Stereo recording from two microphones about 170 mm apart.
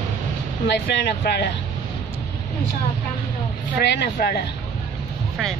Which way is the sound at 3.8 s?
75° left (ahead or behind).